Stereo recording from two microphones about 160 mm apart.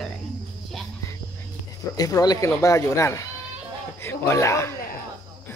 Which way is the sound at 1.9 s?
25° left (ahead or behind).